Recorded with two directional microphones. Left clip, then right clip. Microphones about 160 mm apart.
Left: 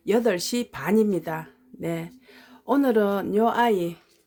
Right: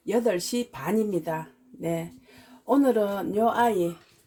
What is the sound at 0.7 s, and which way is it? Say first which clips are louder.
Speech: left 6 dB; 20° left (ahead or behind).